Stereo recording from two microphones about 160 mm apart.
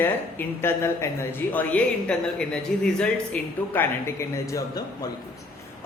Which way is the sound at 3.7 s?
15° left (ahead or behind).